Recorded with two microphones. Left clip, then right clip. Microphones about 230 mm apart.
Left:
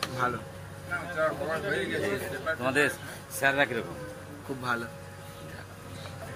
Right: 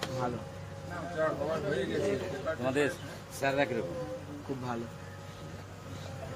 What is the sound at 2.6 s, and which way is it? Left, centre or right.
A man's voice, centre.